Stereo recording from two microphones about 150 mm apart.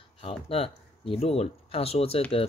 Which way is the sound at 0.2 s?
40° left (ahead or behind).